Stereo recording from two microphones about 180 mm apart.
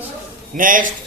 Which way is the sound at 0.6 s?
45° right (ahead or behind).